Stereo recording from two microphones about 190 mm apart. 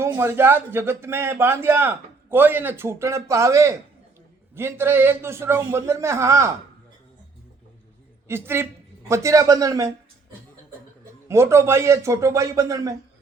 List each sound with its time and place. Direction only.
0.0 s a man's voice: 10° right (ahead or behind)
8.3 s a man's voice: 10° right (ahead or behind)
11.3 s a man's voice: 15° right (ahead or behind)